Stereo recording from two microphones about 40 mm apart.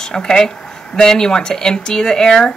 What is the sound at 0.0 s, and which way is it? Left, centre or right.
Speech, centre.